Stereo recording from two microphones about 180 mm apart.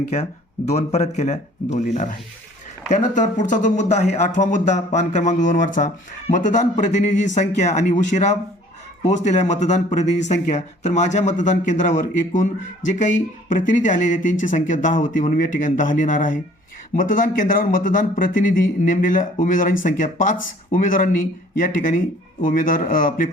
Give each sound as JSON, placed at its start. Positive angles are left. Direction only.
{"t": 0.1, "sound": "speech", "side_deg": 35}